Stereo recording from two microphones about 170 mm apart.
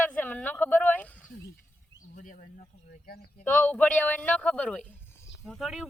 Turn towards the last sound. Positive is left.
turn(degrees=0)  # may be behind; listen again after turning